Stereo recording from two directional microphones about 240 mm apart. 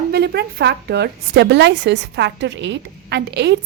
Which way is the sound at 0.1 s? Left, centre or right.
Right.